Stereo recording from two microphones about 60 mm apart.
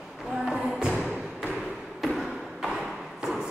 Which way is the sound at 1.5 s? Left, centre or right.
Centre.